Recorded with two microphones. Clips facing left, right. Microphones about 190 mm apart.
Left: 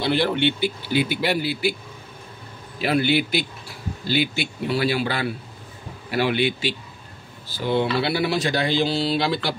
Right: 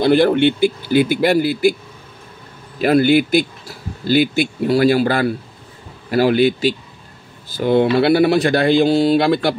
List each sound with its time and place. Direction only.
0.0 s a man's voice: 50° right (ahead or behind)
2.8 s a man's voice: 45° right (ahead or behind)